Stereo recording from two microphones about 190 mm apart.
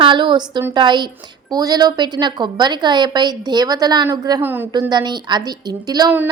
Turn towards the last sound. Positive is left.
turn(degrees=-20)  # may be behind; listen again after turning